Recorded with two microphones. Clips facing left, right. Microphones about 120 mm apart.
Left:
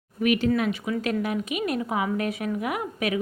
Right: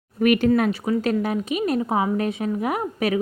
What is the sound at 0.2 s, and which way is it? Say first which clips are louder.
Speech: right 5 dB; 50° right (ahead or behind).